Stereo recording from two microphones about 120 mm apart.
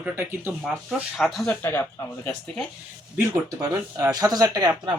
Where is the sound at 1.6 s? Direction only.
20° left (ahead or behind).